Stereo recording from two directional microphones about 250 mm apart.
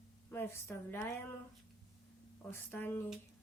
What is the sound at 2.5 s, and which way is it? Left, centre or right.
Speech, centre.